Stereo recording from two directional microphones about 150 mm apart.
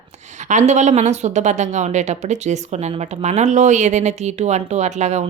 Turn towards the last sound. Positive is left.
turn(degrees=-50)  # may be behind; listen again after turning